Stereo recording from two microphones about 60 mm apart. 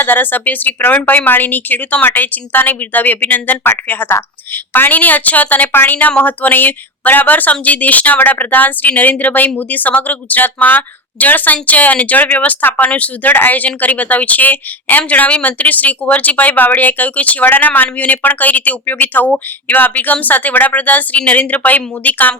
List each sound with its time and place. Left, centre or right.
0.0 s a woman's voice: left